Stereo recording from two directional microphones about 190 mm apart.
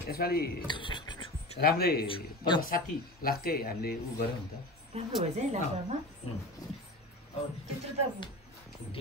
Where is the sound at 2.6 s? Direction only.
50° left (ahead or behind).